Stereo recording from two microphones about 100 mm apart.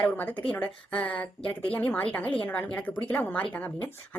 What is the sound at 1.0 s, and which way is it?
A woman's voice, 15° left (ahead or behind).